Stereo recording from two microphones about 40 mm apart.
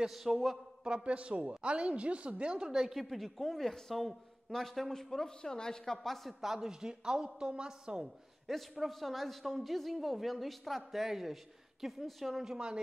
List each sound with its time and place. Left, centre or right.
0.1 s a man's voice: centre
0.8 s a woman's voice: right
1.1 s a man's voice: right
2.6 s a man's voice: centre
3.0 s a man's voice: centre
6.2 s a man's voice: centre
8.5 s a man's voice: centre
12.5 s a woman's voice: right